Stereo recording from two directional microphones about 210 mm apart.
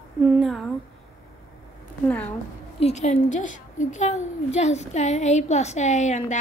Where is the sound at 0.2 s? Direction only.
5° right (ahead or behind).